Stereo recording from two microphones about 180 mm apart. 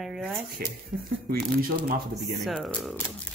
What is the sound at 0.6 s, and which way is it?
Speech, 55° right (ahead or behind).